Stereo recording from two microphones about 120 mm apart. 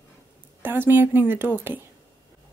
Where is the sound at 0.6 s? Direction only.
15° right (ahead or behind).